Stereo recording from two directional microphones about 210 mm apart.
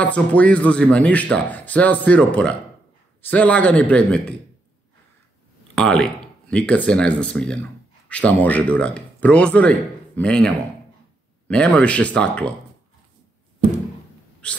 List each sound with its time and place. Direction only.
0.0 s speech: 5° left (ahead or behind)
5.8 s speech: 5° left (ahead or behind)
14.4 s speech: 5° left (ahead or behind)